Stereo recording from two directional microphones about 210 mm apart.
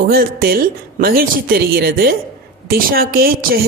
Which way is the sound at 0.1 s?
45° right (ahead or behind).